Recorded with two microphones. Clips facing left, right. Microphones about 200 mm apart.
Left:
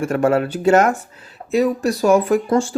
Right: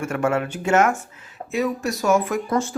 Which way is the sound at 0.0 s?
35° left (ahead or behind).